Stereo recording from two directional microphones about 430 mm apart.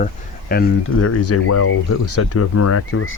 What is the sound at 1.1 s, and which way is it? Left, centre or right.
Speech, left.